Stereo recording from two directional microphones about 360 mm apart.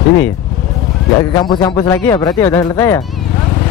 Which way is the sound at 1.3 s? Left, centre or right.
Centre.